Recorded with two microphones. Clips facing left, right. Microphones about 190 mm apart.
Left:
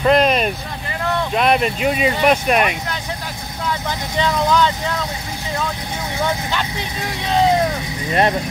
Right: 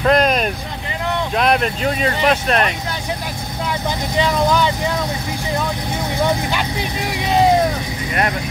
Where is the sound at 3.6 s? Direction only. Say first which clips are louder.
Right 1 dB; 15° right (ahead or behind).